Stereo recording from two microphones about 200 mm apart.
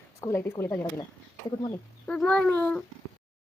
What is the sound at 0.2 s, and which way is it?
A woman's voice, 15° left (ahead or behind).